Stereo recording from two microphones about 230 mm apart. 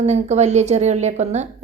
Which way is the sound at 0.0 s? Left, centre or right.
Right.